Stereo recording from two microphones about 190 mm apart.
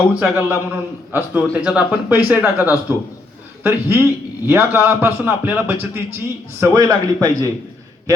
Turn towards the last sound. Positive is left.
turn(degrees=-20)  # may be behind; listen again after turning